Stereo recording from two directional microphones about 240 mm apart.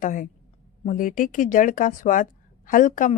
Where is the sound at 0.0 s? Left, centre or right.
Left.